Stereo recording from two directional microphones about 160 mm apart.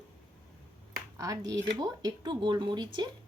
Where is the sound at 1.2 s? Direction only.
20° right (ahead or behind).